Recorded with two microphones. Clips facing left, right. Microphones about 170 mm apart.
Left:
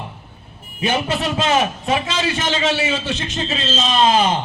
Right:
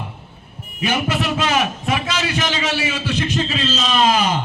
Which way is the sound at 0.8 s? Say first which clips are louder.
Even; 25° left (ahead or behind).